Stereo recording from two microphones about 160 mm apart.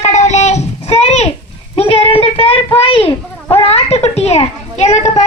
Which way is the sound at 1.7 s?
35° left (ahead or behind).